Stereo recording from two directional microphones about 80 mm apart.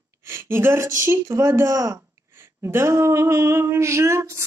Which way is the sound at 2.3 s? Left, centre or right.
Right.